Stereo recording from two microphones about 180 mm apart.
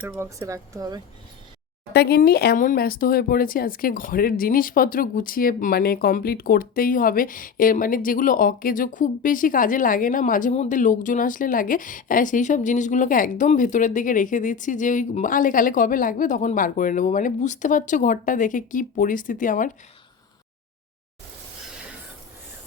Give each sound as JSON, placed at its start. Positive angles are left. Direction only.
{"t": 0.0, "sound": "speech", "side_deg": -15}
{"t": 1.9, "sound": "speech", "side_deg": 65}